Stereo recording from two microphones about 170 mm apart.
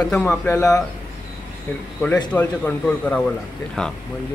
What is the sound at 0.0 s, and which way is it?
Speech, 5° left (ahead or behind).